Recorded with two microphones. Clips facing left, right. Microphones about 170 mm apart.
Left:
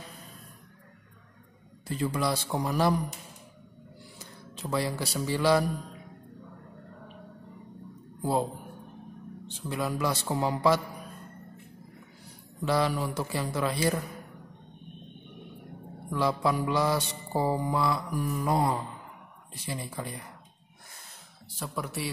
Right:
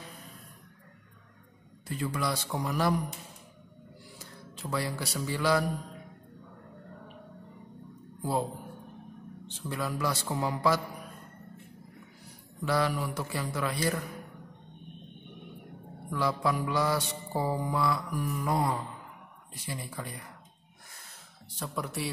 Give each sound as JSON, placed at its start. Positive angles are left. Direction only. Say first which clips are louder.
{"t": 1.9, "sound": "mantra", "louder": "left 3 dB", "side_deg": 30}
{"t": 4.2, "sound": "speech", "louder": "left 3 dB", "side_deg": 20}
{"t": 8.2, "sound": "speech", "louder": "left 3 dB", "side_deg": 25}
{"t": 9.7, "sound": "mantra", "louder": "left 2 dB", "side_deg": 20}
{"t": 12.6, "sound": "mantra", "louder": "left 2 dB", "side_deg": 25}
{"t": 16.1, "sound": "mantra", "louder": "left 2 dB", "side_deg": 25}
{"t": 21.5, "sound": "a man's voice", "louder": "even", "side_deg": 0}